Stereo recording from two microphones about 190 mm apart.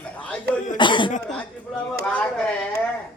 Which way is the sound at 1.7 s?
Centre (ahead or behind).